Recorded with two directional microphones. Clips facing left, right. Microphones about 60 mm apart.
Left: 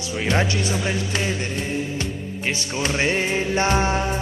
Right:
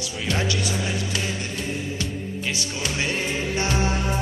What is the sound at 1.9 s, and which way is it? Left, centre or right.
Music, left.